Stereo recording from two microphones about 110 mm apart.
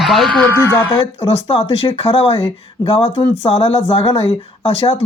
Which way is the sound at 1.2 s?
60° left (ahead or behind).